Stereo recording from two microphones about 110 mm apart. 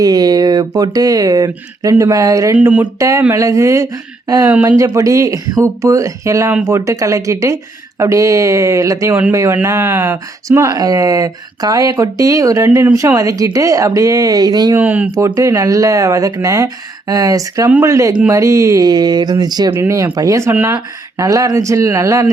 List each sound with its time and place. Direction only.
0.0 s speech: 35° right (ahead or behind)
2.6 s speech: 15° right (ahead or behind)
3.0 s speech: 30° right (ahead or behind)
14.8 s speech: 15° right (ahead or behind)
15.4 s speech: 30° right (ahead or behind)
19.7 s speech: 25° right (ahead or behind)